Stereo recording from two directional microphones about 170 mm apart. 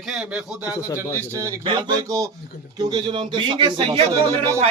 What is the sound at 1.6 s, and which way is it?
Speech, 25° right (ahead or behind).